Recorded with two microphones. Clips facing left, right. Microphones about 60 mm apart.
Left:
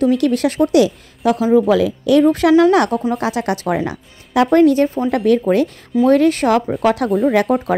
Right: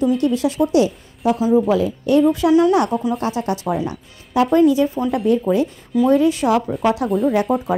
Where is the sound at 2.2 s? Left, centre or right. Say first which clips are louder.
Left 3 dB; left.